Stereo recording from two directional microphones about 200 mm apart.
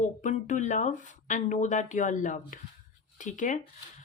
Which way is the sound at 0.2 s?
40° left (ahead or behind).